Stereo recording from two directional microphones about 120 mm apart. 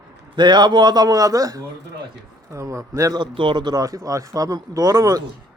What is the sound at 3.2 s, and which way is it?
Speech, 40° right (ahead or behind).